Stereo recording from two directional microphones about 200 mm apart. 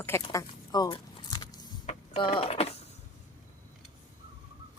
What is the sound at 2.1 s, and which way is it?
Speech, 25° left (ahead or behind).